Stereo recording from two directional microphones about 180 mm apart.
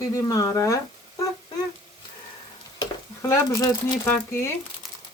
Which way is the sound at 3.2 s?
20° left (ahead or behind).